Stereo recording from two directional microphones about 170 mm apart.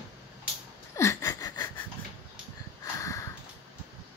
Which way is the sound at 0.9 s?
15° left (ahead or behind).